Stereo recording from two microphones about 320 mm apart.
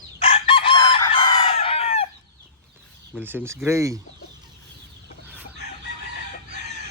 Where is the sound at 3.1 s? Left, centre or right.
Centre.